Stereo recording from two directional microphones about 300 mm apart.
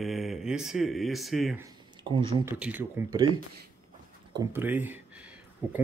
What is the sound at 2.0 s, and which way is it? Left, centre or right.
Speech, centre.